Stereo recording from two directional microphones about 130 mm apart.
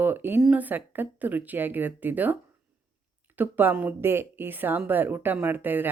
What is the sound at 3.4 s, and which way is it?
Speech, 15° right (ahead or behind).